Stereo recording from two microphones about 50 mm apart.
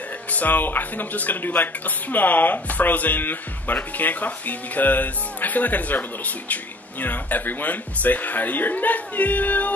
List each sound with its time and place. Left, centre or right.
0.3 s speech: left